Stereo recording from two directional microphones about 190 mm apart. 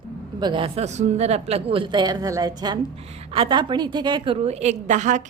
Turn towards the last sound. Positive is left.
turn(degrees=-40)  # may be behind; listen again after turning